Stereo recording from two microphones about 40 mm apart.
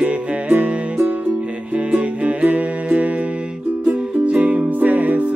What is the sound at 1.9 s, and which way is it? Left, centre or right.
Music, right.